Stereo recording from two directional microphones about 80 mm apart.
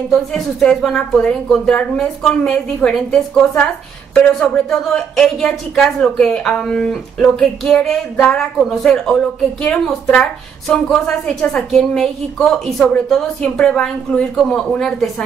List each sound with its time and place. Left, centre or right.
0.1 s a woman's voice: centre